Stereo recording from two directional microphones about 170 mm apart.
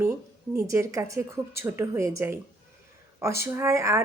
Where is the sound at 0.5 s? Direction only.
15° right (ahead or behind).